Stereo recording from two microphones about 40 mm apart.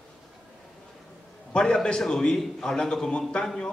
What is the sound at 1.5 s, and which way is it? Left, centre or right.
A man's voice, centre.